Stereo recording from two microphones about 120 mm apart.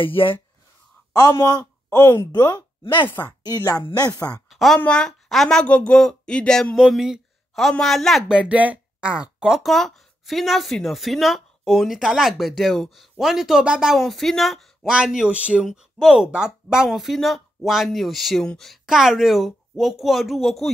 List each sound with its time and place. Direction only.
0.0 s speech: 45° left (ahead or behind)
1.1 s speech: 30° left (ahead or behind)
2.8 s speech: 40° left (ahead or behind)
3.4 s speech: 30° left (ahead or behind)
4.5 s a sound: centre (ahead or behind)
4.7 s a woman's voice: 10° left (ahead or behind)
6.8 s speech: 5° right (ahead or behind)